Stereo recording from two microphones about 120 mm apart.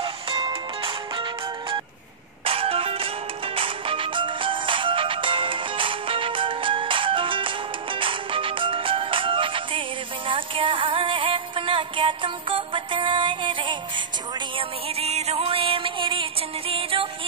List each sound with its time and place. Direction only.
0.0 s music: 50° right (ahead or behind)
14.6 s music: 60° right (ahead or behind)